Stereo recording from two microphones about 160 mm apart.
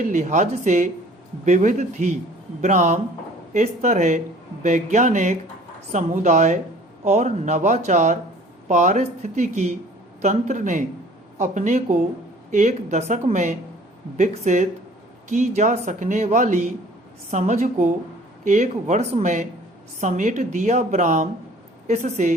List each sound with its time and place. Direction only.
0.1 s speech: 50° right (ahead or behind)